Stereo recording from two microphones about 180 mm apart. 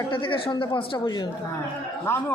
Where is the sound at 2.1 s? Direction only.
15° left (ahead or behind).